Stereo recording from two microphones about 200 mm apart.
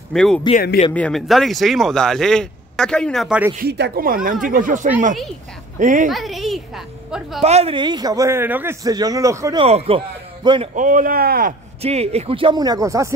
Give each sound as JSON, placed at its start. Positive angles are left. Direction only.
{"t": 0.1, "sound": "speech", "side_deg": 5}
{"t": 3.5, "sound": "a woman's voice", "side_deg": -55}
{"t": 6.0, "sound": "speech", "side_deg": 0}
{"t": 7.4, "sound": "a man's voice", "side_deg": -30}
{"t": 9.7, "sound": "a man's voice", "side_deg": -30}
{"t": 10.7, "sound": "speech", "side_deg": -40}
{"t": 11.8, "sound": "a man's voice", "side_deg": -30}